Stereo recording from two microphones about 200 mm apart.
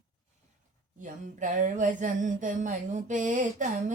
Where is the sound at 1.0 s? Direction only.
40° right (ahead or behind).